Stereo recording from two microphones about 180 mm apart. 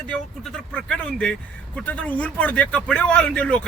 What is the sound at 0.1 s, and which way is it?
Speech, 5° left (ahead or behind).